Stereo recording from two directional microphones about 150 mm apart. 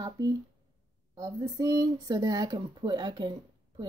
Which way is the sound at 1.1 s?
25° right (ahead or behind).